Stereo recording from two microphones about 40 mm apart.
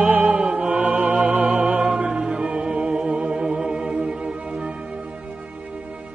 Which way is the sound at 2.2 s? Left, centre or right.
Right.